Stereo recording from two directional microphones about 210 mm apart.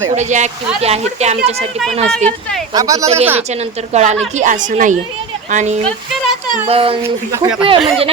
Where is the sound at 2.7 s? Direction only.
15° right (ahead or behind).